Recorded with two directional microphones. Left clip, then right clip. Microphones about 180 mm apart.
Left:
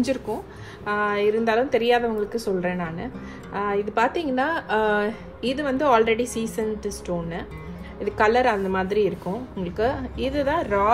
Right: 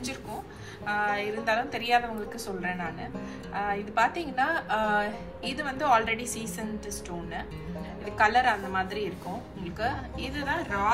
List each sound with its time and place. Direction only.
0.8 s a woman's voice: 60° left (ahead or behind)
8.0 s a woman's voice: 60° left (ahead or behind)